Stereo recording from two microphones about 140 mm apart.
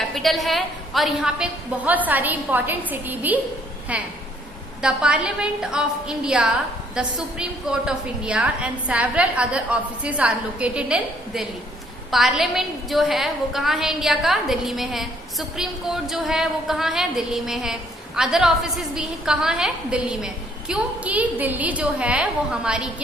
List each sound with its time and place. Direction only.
0.0 s a woman's voice: centre (ahead or behind)